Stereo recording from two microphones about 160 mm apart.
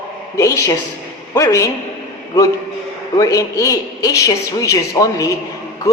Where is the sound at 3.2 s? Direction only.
20° left (ahead or behind).